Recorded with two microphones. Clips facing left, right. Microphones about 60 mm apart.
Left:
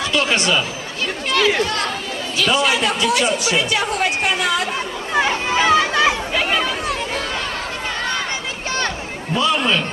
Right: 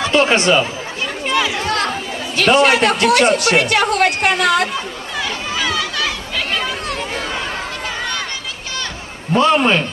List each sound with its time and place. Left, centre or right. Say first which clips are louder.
0.0 s speech: right 5 dB; right
2.3 s speech: right 5 dB; right
5.1 s chatter: left 6 dB; left
6.6 s a sound: left 1 dB; centre
9.3 s a man's voice: right 5 dB; right